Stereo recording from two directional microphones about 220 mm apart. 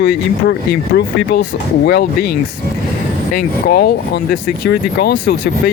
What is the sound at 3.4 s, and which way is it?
Speech, 45° left (ahead or behind).